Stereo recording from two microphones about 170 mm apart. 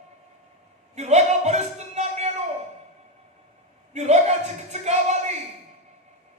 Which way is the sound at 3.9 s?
40° right (ahead or behind).